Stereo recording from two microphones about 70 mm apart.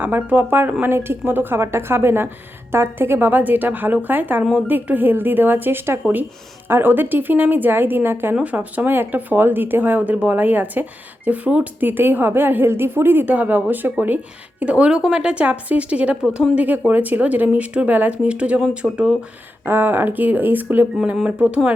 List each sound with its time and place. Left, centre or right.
0.0 s a woman's voice: right
8.4 s a woman's voice: right
19.6 s a woman's voice: right